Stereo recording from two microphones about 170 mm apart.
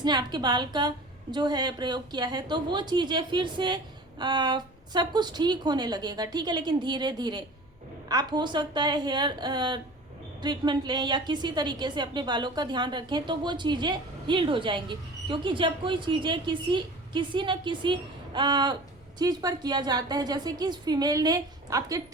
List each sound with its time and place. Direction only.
0.0 s a woman's voice: 25° right (ahead or behind)